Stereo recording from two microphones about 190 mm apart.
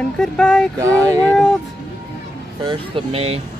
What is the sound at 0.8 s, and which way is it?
Speech, 15° right (ahead or behind).